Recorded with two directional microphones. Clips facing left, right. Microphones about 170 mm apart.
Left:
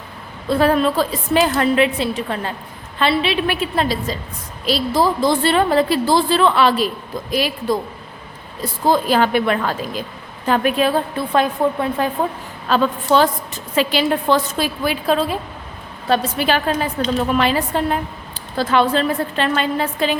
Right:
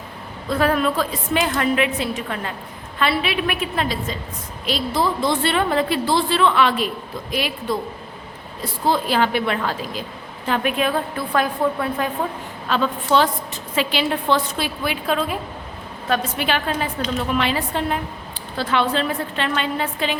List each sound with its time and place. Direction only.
0.4 s a woman's voice: 30° left (ahead or behind)
8.9 s a woman's voice: 45° left (ahead or behind); by 12.0 s 25° left (ahead or behind)
12.6 s a woman's voice: 40° left (ahead or behind)